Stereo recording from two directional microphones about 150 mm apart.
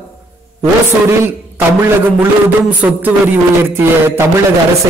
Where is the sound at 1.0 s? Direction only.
15° right (ahead or behind).